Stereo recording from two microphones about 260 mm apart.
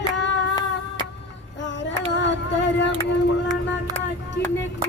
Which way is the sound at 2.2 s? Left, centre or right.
Left.